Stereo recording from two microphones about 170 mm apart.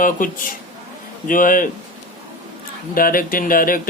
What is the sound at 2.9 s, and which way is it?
Speech, 55° left (ahead or behind).